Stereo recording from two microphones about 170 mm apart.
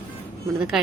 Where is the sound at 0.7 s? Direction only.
5° right (ahead or behind).